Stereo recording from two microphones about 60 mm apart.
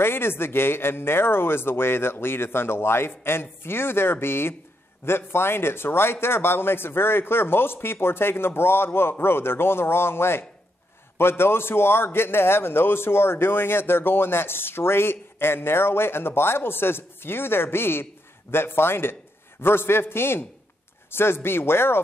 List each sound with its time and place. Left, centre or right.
0.0 s a man's voice: left